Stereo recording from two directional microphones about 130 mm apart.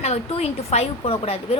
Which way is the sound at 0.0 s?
55° left (ahead or behind).